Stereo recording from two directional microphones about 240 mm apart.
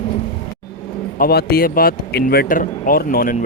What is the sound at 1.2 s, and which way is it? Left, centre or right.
Speech, left.